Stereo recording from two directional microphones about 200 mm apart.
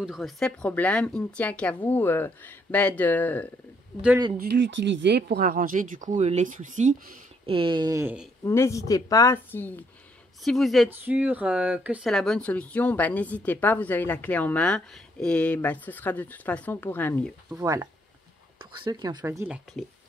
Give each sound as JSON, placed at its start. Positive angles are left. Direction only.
{"t": 0.0, "sound": "speech", "side_deg": 0}
{"t": 4.4, "sound": "speech", "side_deg": -60}
{"t": 5.4, "sound": "speech", "side_deg": -45}
{"t": 8.5, "sound": "a woman's voice", "side_deg": 15}
{"t": 17.5, "sound": "speech", "side_deg": -15}